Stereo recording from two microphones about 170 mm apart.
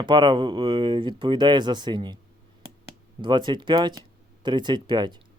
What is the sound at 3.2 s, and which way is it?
Speech, 25° right (ahead or behind).